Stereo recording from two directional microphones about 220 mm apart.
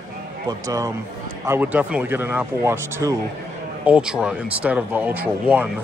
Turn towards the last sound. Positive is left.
turn(degrees=-10)  # may be behind; listen again after turning